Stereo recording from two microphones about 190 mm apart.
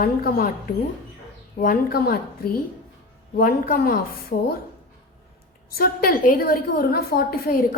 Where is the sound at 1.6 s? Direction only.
50° left (ahead or behind).